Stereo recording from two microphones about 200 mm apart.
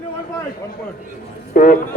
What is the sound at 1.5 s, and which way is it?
Speech, 45° left (ahead or behind).